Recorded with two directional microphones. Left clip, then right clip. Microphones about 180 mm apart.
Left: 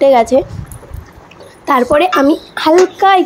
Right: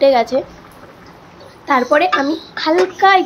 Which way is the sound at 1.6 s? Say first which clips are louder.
Left 3 dB; 35° left (ahead or behind).